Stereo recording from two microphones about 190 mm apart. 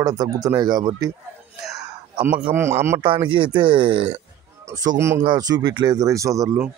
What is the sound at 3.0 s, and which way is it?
Speech, 25° right (ahead or behind).